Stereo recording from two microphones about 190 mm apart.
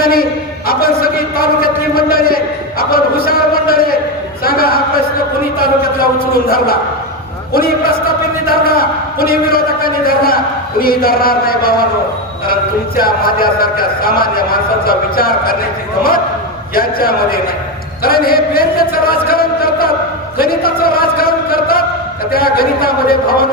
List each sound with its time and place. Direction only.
0.0 s a man's voice: 50° left (ahead or behind)
0.7 s a sound: 50° left (ahead or behind)
5.5 s a man's voice: 50° left (ahead or behind)
8.4 s a man's voice: 50° left (ahead or behind)
13.0 s a man's voice: 50° left (ahead or behind)
16.7 s a man's voice: 50° left (ahead or behind)
20.4 s a sound: 50° left (ahead or behind)
22.3 s a man's voice: 55° left (ahead or behind)